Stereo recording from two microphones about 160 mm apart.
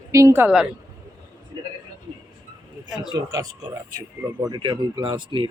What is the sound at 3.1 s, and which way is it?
Speech, 25° right (ahead or behind).